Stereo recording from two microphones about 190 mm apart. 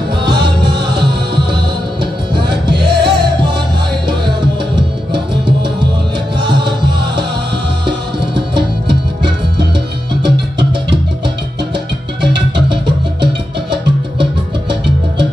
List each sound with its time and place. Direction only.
0.7 s music: 60° right (ahead or behind)
12.3 s music: 25° right (ahead or behind)